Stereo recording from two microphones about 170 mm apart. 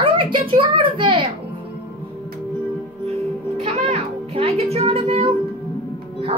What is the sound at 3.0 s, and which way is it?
Music, 40° right (ahead or behind).